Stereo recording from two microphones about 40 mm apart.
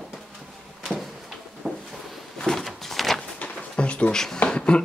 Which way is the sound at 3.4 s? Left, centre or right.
Left.